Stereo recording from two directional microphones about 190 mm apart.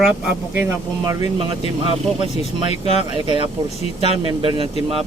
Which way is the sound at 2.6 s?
35° left (ahead or behind).